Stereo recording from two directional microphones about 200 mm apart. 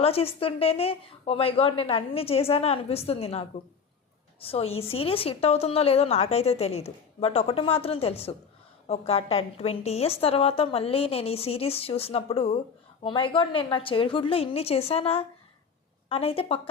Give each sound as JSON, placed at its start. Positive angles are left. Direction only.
{"t": 0.0, "sound": "a woman's voice", "side_deg": 30}